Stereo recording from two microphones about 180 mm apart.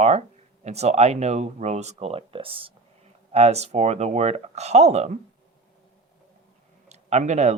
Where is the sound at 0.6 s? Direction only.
35° right (ahead or behind).